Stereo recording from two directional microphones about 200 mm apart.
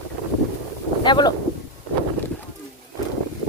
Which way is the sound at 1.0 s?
20° left (ahead or behind).